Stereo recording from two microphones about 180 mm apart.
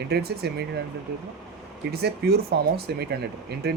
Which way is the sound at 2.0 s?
60° right (ahead or behind).